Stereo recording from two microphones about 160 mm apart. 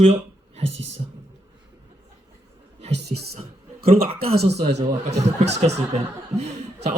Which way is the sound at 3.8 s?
40° right (ahead or behind).